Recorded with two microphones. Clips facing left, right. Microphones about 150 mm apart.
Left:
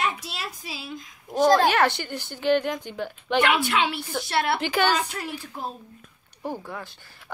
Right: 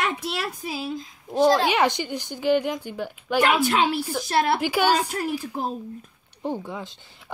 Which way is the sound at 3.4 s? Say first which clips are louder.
Right 2 dB; 40° right (ahead or behind).